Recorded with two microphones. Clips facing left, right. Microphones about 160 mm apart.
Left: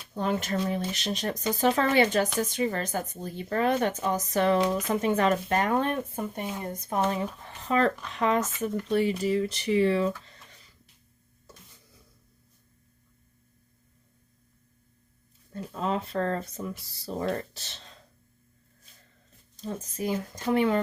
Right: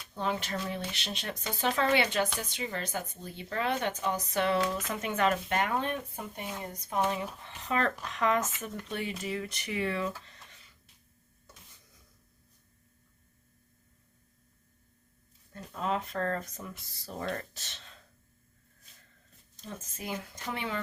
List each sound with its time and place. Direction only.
0.1 s speech: 45° left (ahead or behind)
15.5 s speech: 30° left (ahead or behind)
19.5 s speech: 35° left (ahead or behind)